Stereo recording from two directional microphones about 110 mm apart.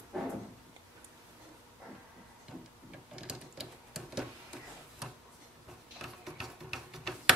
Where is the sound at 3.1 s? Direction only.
10° right (ahead or behind).